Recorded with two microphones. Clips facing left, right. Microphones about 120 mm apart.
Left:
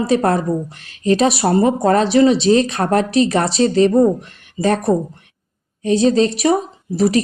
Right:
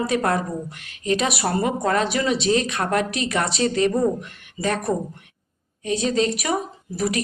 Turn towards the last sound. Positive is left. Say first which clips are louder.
# left 8 dB
turn(degrees=30)  # may be behind; listen again after turning